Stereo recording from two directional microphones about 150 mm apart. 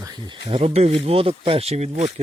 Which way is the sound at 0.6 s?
45° right (ahead or behind).